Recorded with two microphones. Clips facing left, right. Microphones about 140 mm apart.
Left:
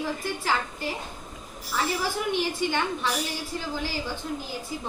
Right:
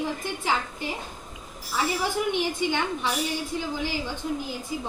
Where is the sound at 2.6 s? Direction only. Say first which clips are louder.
Even; 15° right (ahead or behind).